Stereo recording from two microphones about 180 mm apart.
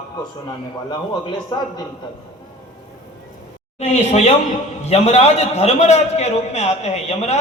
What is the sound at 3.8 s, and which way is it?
A man's voice, 40° left (ahead or behind).